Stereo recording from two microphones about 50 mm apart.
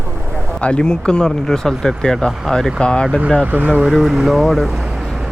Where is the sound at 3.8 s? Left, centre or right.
Centre.